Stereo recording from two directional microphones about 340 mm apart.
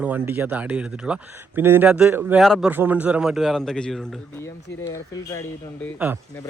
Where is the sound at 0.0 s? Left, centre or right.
Centre.